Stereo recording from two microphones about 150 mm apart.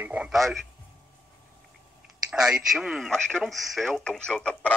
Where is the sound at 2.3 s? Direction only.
5° right (ahead or behind).